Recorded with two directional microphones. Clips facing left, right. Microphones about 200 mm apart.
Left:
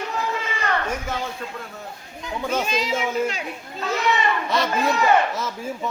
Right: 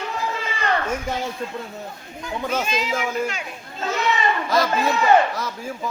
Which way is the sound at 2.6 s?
35° left (ahead or behind).